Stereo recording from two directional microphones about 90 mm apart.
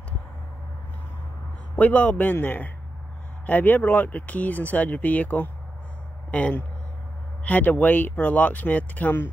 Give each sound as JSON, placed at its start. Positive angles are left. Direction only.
{"t": 1.8, "sound": "speech", "side_deg": 15}